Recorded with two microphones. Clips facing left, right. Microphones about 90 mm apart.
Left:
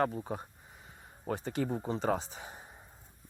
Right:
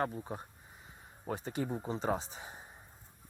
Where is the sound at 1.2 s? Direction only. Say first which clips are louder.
Left 3 dB; 60° left (ahead or behind).